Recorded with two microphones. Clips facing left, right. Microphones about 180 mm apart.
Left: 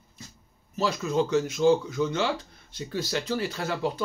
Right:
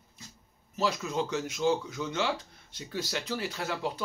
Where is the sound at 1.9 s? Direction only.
15° right (ahead or behind).